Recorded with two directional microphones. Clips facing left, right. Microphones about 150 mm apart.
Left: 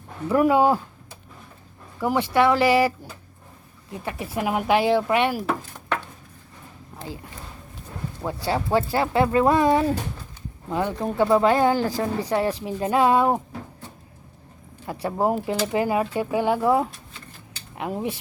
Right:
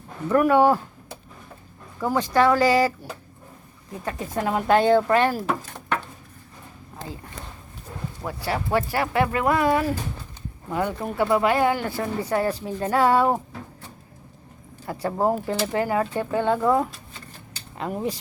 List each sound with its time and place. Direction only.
0.3 s speech: 15° left (ahead or behind)
2.0 s speech: 15° left (ahead or behind)
4.3 s speech: 10° left (ahead or behind)
8.2 s speech: 20° left (ahead or behind)
12.3 s speech: 15° left (ahead or behind)
15.0 s speech: 15° left (ahead or behind)